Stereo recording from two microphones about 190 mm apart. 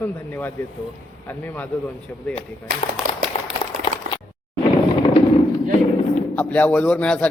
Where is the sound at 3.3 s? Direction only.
35° left (ahead or behind).